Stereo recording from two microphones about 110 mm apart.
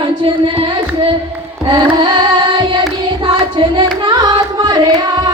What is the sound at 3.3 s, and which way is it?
Music, 50° right (ahead or behind).